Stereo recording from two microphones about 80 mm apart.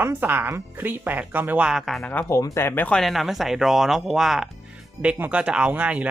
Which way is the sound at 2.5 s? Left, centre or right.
Left.